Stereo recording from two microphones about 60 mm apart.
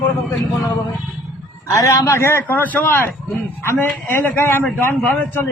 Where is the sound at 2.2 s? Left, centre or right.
Left.